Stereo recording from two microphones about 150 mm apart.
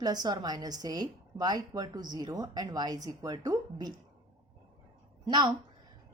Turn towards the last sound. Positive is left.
turn(degrees=-30)  # may be behind; listen again after turning